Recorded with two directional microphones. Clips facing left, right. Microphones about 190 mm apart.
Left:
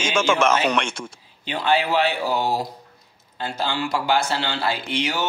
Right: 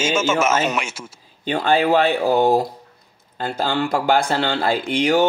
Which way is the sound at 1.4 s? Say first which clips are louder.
Right 4 dB; 50° right (ahead or behind).